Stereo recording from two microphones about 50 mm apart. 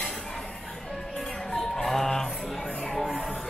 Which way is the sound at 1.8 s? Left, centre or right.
Centre.